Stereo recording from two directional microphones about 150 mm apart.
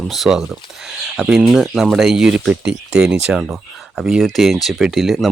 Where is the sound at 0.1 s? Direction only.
Centre (ahead or behind).